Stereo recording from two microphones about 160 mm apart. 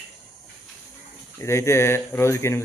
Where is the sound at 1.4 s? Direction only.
15° left (ahead or behind).